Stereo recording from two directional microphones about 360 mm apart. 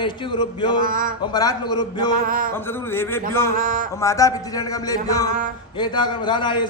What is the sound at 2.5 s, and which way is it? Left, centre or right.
A man's voice, centre.